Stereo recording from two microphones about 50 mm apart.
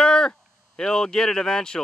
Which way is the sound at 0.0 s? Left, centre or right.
Centre.